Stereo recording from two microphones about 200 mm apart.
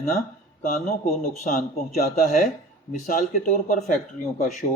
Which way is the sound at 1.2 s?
45° left (ahead or behind).